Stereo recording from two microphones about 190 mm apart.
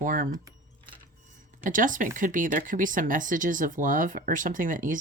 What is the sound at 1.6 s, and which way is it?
Speech, 45° right (ahead or behind).